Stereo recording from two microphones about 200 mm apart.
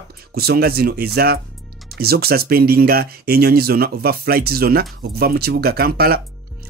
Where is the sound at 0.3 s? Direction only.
50° right (ahead or behind).